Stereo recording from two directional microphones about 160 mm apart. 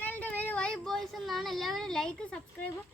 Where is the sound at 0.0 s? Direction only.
10° left (ahead or behind).